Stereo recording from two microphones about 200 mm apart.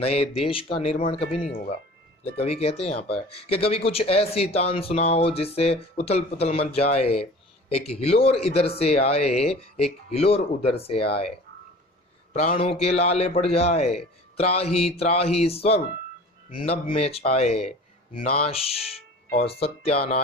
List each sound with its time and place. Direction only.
0.0 s a man's voice: 30° left (ahead or behind)
12.3 s a man's voice: 30° left (ahead or behind)